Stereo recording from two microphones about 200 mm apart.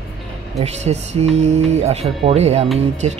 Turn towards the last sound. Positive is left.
turn(degrees=-35)  # may be behind; listen again after turning